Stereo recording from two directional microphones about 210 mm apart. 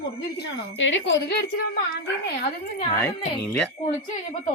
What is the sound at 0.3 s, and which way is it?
Speech, 60° left (ahead or behind).